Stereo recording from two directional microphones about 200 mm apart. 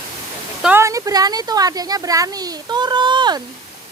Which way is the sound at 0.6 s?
10° right (ahead or behind).